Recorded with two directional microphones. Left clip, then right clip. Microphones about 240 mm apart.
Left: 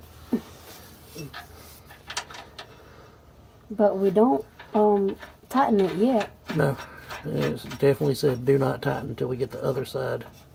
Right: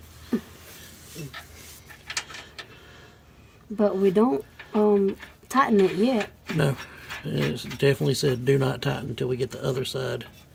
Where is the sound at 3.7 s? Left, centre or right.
Right.